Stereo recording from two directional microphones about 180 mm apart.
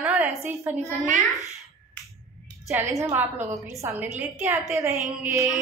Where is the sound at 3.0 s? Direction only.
10° right (ahead or behind).